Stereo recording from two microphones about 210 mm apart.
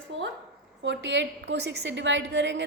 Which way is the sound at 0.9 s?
60° right (ahead or behind).